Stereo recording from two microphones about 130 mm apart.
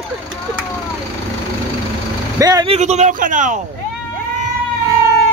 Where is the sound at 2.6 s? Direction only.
60° right (ahead or behind); by 3.6 s 75° right (ahead or behind).